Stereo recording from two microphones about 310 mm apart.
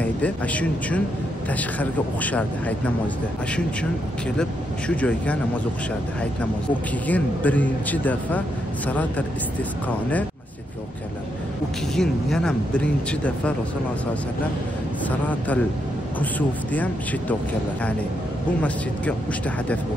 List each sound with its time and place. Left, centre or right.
0.0 s speech: centre
4.4 s speech: centre
7.1 s speech: centre
11.9 s speech: centre
15.0 s speech: centre